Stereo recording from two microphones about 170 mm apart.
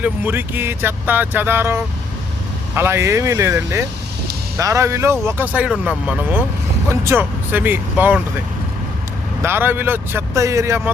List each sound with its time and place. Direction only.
0.0 s speech: 10° right (ahead or behind)
9.4 s speech: 15° right (ahead or behind)